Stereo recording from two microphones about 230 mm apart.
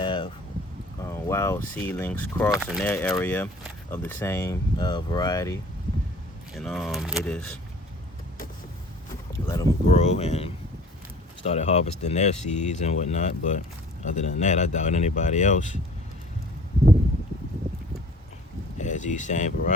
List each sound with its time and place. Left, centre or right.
0.0 s a sound: left
1.0 s speech: centre
6.5 s speech: centre
9.3 s a sound: centre
9.8 s speech: left
18.8 s speech: left